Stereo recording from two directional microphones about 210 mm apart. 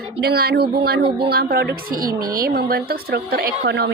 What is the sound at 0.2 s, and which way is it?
A woman's voice, 50° right (ahead or behind).